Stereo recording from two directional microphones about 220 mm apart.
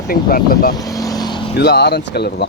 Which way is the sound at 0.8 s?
15° left (ahead or behind).